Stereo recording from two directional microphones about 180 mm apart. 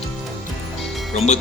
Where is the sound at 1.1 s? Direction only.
35° left (ahead or behind).